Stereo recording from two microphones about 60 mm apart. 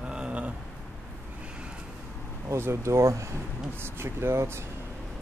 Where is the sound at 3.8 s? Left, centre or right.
Right.